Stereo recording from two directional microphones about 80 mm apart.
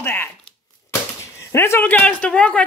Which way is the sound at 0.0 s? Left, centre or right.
Left.